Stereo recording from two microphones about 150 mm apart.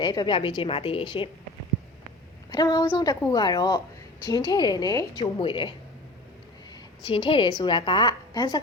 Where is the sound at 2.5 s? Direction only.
25° left (ahead or behind).